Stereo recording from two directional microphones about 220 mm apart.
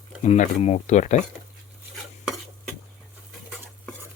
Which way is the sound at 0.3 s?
30° left (ahead or behind).